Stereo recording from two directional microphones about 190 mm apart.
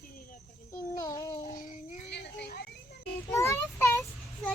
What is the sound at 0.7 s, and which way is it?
Child singing, 15° left (ahead or behind).